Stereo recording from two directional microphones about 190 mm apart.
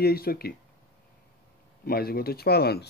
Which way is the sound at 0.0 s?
55° left (ahead or behind).